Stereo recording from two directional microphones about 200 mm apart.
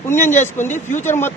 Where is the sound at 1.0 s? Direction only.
10° left (ahead or behind).